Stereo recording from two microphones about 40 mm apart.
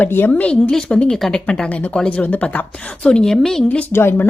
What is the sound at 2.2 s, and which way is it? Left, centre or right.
Speech, left.